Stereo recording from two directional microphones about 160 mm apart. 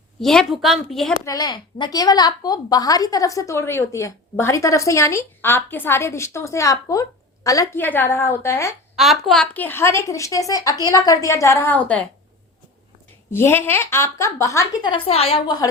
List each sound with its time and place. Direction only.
0.2 s a woman's voice: centre (ahead or behind)
1.2 s a woman's voice: 25° left (ahead or behind)
9.0 s a woman's voice: centre (ahead or behind)
13.3 s a woman's voice: 15° left (ahead or behind); by 15.4 s 40° left (ahead or behind)
15.4 s a woman's voice: 25° left (ahead or behind)